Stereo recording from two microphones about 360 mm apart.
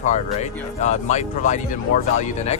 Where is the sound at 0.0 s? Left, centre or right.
Centre.